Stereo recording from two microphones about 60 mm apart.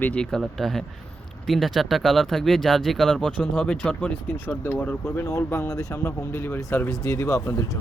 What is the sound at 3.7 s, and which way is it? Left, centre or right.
Speech, centre.